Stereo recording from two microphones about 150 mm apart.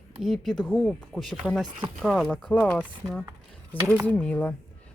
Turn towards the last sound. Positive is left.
turn(degrees=10)  # may be behind; listen again after turning